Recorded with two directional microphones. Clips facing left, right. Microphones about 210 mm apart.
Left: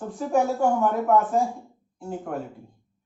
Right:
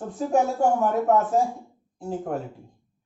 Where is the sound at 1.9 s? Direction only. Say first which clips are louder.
Right 3 dB; 35° right (ahead or behind).